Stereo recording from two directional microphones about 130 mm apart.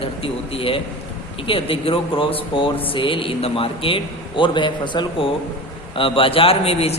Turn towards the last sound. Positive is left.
turn(degrees=50)  # may be behind; listen again after turning